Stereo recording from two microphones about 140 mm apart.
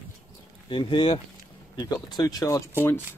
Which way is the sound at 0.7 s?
35° left (ahead or behind).